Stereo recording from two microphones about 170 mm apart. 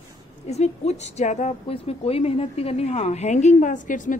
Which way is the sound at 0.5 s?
40° left (ahead or behind).